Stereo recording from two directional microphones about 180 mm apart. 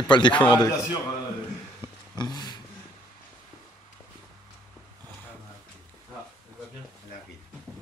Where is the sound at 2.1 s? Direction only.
25° left (ahead or behind).